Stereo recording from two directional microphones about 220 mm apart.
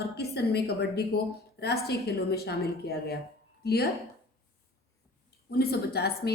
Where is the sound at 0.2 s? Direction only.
50° left (ahead or behind).